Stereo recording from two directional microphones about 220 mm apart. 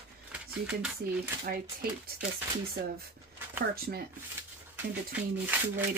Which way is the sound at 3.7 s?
45° right (ahead or behind).